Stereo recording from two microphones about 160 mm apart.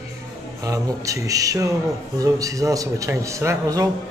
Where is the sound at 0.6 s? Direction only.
20° right (ahead or behind).